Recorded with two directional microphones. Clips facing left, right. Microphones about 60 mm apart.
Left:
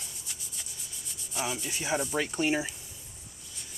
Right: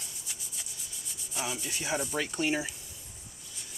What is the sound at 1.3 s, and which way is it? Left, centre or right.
Speech, centre.